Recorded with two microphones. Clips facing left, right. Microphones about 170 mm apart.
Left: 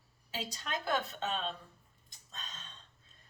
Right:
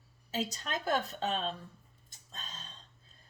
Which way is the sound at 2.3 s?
35° right (ahead or behind).